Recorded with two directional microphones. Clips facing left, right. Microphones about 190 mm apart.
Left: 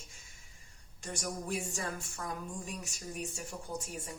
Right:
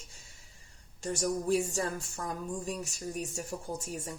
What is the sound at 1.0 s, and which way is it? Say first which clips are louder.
Speech: right 8 dB; 40° right (ahead or behind).